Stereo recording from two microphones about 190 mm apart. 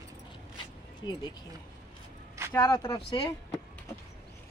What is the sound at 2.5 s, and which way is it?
Speech, 15° left (ahead or behind).